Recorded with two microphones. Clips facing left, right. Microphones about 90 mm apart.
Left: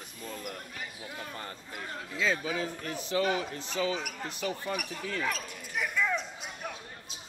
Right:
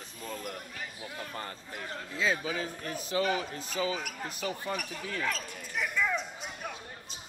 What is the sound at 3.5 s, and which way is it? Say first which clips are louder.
Speech: left 1 dB; 5° right (ahead or behind).